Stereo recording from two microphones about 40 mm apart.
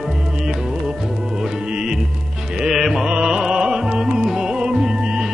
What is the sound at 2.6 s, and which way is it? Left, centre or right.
Music, centre.